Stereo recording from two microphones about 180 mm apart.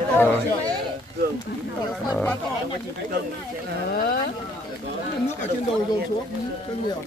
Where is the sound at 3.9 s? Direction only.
50° left (ahead or behind).